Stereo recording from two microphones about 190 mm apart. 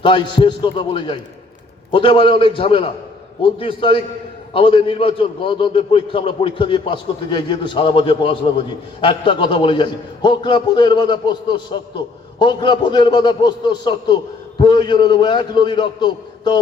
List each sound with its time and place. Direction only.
0.0 s a man's voice: 25° left (ahead or behind)